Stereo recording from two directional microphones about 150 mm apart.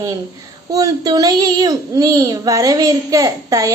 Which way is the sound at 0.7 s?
25° right (ahead or behind).